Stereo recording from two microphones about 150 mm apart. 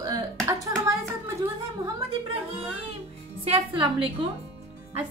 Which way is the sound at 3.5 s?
35° right (ahead or behind).